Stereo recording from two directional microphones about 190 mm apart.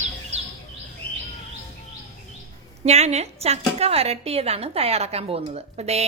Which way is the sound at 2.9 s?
35° right (ahead or behind).